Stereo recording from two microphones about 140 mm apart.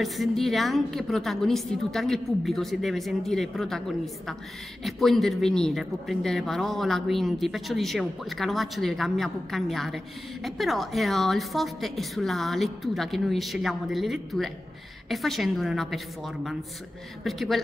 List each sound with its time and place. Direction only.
0.0 s speech: centre (ahead or behind)